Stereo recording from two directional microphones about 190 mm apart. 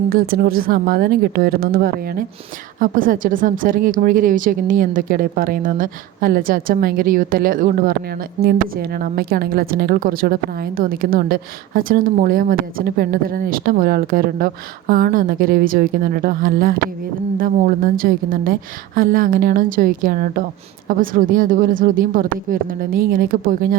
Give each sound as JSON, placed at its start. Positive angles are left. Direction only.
{"t": 0.1, "sound": "a woman's voice", "side_deg": -50}